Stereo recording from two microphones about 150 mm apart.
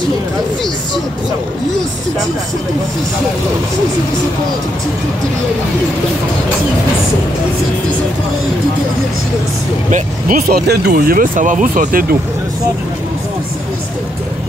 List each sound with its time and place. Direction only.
9.8 s speech: 60° right (ahead or behind)